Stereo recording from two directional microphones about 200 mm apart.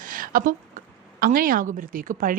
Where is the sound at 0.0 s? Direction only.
45° right (ahead or behind).